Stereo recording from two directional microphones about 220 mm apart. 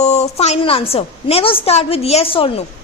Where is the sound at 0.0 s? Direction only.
30° left (ahead or behind).